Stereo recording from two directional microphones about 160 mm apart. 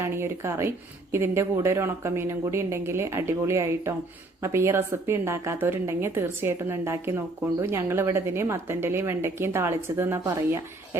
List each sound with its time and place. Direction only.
0.0 s a woman's voice: 15° right (ahead or behind)